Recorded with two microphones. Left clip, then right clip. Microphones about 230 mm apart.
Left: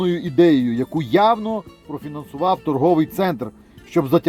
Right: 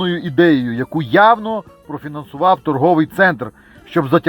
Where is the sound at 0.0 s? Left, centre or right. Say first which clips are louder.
Right 2 dB; centre.